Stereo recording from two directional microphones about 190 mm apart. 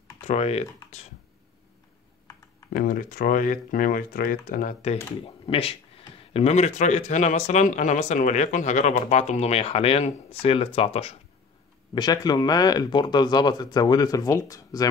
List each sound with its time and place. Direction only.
0.3 s speech: 35° left (ahead or behind)
2.7 s speech: 45° left (ahead or behind)
5.2 s speech: 30° left (ahead or behind)
11.9 s speech: 20° left (ahead or behind)